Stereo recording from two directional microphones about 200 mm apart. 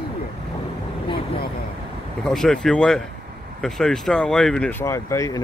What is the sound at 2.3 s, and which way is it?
Speech, centre (ahead or behind).